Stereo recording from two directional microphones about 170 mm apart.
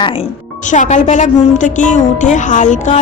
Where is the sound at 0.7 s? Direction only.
45° left (ahead or behind).